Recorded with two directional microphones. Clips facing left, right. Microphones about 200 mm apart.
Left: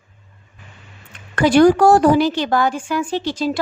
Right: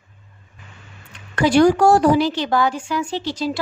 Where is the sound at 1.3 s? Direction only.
55° left (ahead or behind).